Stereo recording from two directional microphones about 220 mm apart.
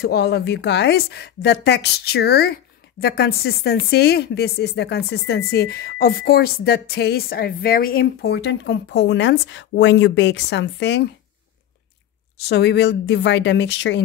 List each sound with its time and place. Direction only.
0.0 s speech: 45° left (ahead or behind)
12.4 s speech: 50° left (ahead or behind)